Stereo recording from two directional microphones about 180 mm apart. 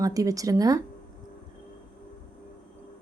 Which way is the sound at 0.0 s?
20° right (ahead or behind).